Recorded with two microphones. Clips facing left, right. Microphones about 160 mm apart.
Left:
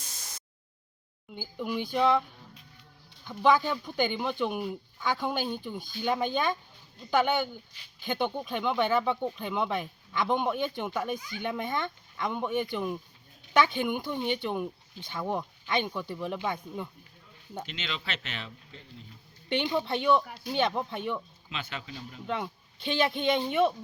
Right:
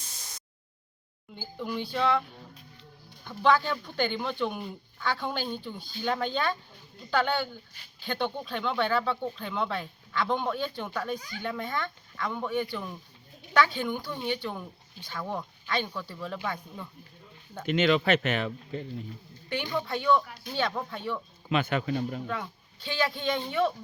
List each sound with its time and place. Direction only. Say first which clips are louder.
1.4 s speech: left 1 dB; 10° left (ahead or behind)
3.2 s speech: even; 15° left (ahead or behind)
17.7 s speech: right 18 dB; 55° right (ahead or behind)
19.5 s speech: left 3 dB; 20° left (ahead or behind)
21.5 s speech: right 12 dB; 55° right (ahead or behind)
22.3 s speech: left 2 dB; 25° left (ahead or behind)